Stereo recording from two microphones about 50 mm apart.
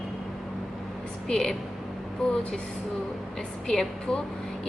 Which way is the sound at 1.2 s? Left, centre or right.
Centre.